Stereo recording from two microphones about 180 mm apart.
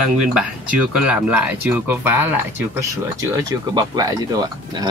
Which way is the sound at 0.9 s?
5° right (ahead or behind).